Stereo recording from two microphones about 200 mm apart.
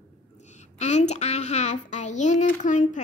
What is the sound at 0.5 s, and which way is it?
A child's voice, 35° left (ahead or behind).